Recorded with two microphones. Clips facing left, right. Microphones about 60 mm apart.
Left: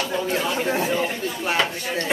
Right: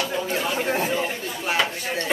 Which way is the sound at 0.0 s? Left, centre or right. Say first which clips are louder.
Left 1 dB; centre.